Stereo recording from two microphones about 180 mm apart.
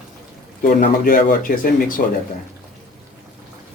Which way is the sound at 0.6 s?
50° left (ahead or behind).